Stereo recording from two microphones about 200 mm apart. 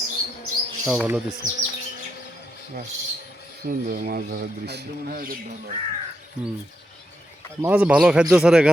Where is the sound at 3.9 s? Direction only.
50° right (ahead or behind).